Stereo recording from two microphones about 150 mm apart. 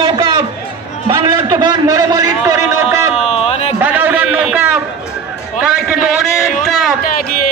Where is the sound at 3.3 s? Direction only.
40° left (ahead or behind).